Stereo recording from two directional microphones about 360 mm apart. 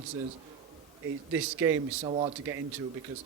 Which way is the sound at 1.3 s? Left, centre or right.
Centre.